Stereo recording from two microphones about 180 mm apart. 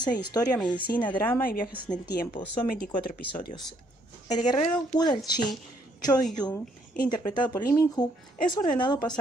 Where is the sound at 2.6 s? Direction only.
50° left (ahead or behind).